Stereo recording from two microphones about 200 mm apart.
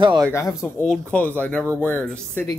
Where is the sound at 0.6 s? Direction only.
5° left (ahead or behind).